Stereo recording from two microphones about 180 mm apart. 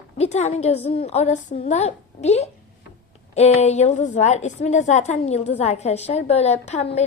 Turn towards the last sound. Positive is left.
turn(degrees=40)  # may be behind; listen again after turning